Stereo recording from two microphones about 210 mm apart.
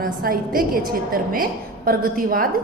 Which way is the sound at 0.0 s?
45° right (ahead or behind).